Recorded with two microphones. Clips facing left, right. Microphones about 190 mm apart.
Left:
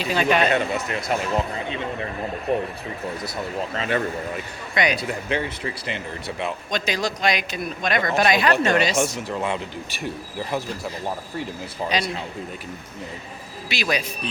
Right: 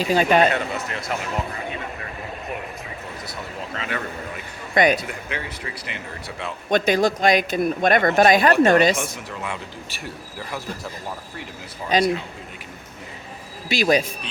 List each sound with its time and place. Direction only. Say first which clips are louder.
0.0 s a man's voice: right 3 dB; 40° right (ahead or behind)
0.5 s a man's voice: left 3 dB; 20° left (ahead or behind)
3.8 s a man's voice: left 5 dB; 30° left (ahead or behind)
4.7 s a man's voice: right 5 dB; 50° right (ahead or behind)
4.9 s speech: left 6 dB; 30° left (ahead or behind)
6.7 s a man's voice: right 10 dB; 55° right (ahead or behind)
9.4 s speech: left 4 dB; 20° left (ahead or behind)
11.8 s a man's voice: right 3 dB; 30° left (ahead or behind)
13.7 s a man's voice: right 6 dB; 45° right (ahead or behind)